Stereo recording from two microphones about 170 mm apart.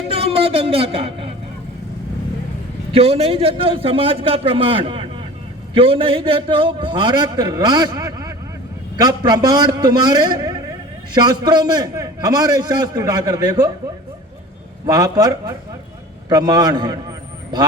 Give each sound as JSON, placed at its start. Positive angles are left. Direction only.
{"t": 0.1, "sound": "a sound", "side_deg": -35}
{"t": 2.9, "sound": "a man's voice", "side_deg": -35}
{"t": 14.8, "sound": "a man's voice", "side_deg": -20}